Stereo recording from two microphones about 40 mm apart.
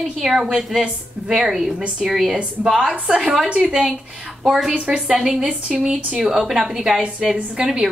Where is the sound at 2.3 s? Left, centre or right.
Centre.